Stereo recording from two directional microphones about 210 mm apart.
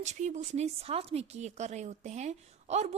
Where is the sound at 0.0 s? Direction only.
35° right (ahead or behind).